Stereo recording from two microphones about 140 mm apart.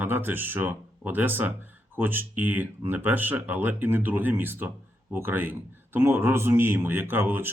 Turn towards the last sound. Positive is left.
turn(degrees=-15)  # may be behind; listen again after turning